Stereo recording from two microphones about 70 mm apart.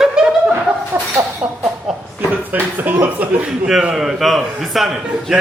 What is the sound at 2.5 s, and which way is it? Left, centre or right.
Speech, right.